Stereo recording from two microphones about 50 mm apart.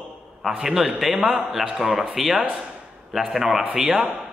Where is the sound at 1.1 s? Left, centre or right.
Centre.